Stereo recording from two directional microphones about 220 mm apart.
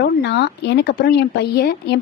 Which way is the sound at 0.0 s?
50° left (ahead or behind).